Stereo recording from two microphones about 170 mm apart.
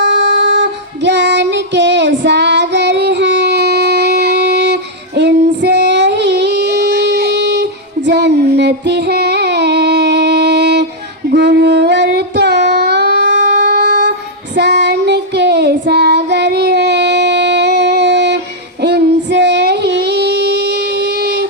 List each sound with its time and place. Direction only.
0.0 s child singing: 90° right
18.8 s female singing: 80° right